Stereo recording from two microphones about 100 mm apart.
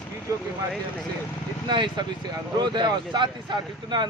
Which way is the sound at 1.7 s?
50° right (ahead or behind).